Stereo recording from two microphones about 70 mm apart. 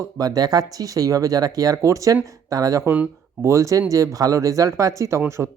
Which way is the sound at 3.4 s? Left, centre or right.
Right.